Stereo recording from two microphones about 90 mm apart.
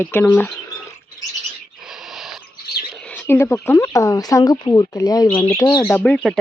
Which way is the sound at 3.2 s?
25° left (ahead or behind).